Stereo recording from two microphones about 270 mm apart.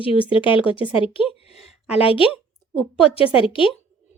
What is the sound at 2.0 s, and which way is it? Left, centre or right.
Speech, left.